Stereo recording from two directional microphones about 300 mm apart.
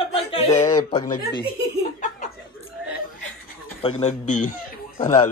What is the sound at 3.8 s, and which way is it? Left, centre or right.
Speech, left.